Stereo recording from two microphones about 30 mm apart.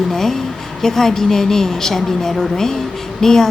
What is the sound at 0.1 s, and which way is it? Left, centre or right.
A woman's voice, centre.